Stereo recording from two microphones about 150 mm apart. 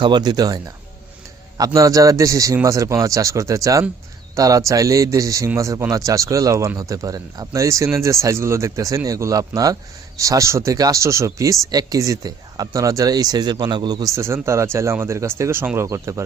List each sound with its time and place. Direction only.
0.0 s speech: 30° right (ahead or behind)